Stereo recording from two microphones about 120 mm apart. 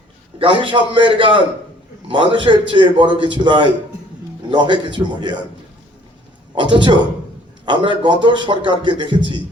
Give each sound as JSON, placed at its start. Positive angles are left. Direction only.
{"t": 0.3, "sound": "a man's voice", "side_deg": -45}
{"t": 6.6, "sound": "a man's voice", "side_deg": -40}